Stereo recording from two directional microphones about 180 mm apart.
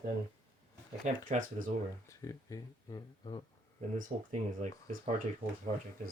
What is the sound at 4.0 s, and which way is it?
Speech, 40° right (ahead or behind).